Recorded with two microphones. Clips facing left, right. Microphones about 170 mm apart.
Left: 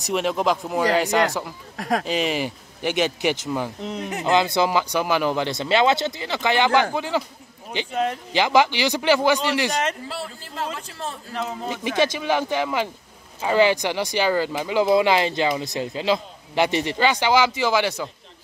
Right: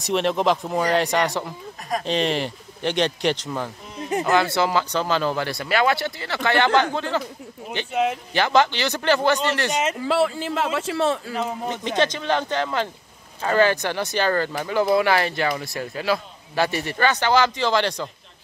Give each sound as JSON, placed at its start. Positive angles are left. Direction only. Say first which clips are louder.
{"t": 0.0, "sound": "speech", "louder": "right 1 dB", "side_deg": 0}
{"t": 1.8, "sound": "speech", "louder": "left 4 dB", "side_deg": 90}
{"t": 2.0, "sound": "speech", "louder": "right 1 dB", "side_deg": 5}
{"t": 3.8, "sound": "speech", "louder": "left 5 dB", "side_deg": 70}
{"t": 4.2, "sound": "speech", "louder": "left 1 dB", "side_deg": 20}
{"t": 7.9, "sound": "speech", "louder": "right 2 dB", "side_deg": -5}
{"t": 8.3, "sound": "speech", "louder": "left 3 dB", "side_deg": 15}
{"t": 9.7, "sound": "speech", "louder": "right 1 dB", "side_deg": -5}
{"t": 9.9, "sound": "a man's voice", "louder": "right 12 dB", "side_deg": -90}
{"t": 12.0, "sound": "speech", "louder": "left 1 dB", "side_deg": 10}